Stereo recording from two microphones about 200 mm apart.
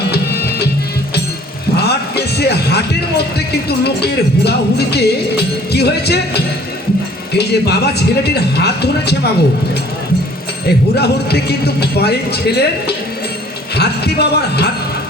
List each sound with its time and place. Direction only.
0.1 s music: 50° left (ahead or behind)
1.7 s speech: 55° left (ahead or behind)
10.9 s speech: 55° left (ahead or behind)
13.7 s speech: 55° left (ahead or behind)